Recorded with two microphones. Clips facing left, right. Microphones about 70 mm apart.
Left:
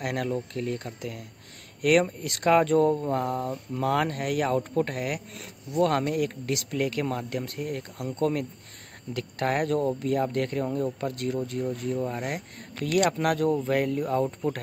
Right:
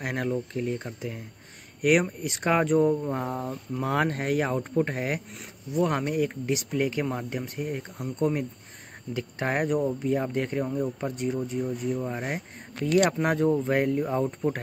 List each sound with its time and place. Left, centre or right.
0.0 s speech: right
2.9 s a sound: centre
3.2 s speech: centre